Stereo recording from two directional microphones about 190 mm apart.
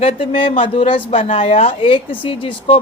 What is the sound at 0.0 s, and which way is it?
A woman's voice, 30° left (ahead or behind).